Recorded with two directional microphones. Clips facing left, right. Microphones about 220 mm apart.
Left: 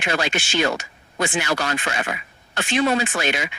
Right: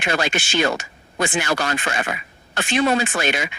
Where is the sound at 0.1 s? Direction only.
50° right (ahead or behind).